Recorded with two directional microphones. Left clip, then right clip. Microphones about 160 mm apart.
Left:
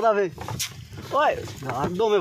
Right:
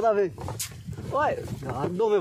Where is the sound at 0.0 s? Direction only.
25° left (ahead or behind).